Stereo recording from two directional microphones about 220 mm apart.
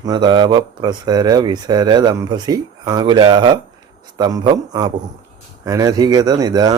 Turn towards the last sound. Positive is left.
turn(degrees=-15)  # may be behind; listen again after turning